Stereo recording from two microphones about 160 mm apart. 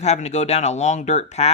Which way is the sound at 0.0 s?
45° left (ahead or behind).